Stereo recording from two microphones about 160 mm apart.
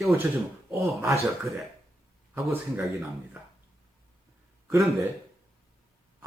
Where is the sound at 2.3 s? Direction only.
10° right (ahead or behind).